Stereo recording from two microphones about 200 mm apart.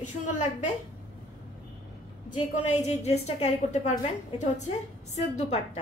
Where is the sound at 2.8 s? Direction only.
35° left (ahead or behind).